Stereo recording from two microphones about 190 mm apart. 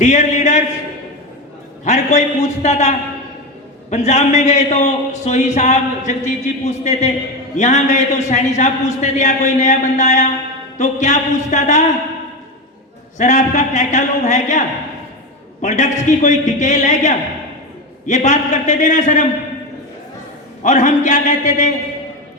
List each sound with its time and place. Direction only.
0.0 s a man's voice: 40° left (ahead or behind)
1.8 s a man's voice: 35° left (ahead or behind)
13.1 s a man's voice: 40° left (ahead or behind)
15.6 s a man's voice: 40° left (ahead or behind)
20.7 s a man's voice: 40° left (ahead or behind)